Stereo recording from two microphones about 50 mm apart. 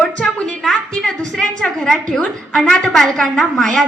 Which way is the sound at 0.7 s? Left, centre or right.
Centre.